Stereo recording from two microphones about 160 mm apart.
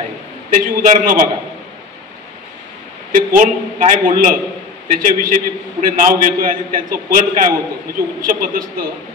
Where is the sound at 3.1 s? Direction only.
55° right (ahead or behind).